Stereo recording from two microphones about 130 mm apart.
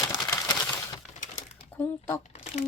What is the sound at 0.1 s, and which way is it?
Typewriter, 30° left (ahead or behind).